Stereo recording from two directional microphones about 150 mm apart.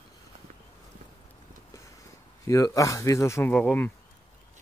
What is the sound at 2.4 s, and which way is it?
Speech, 20° left (ahead or behind).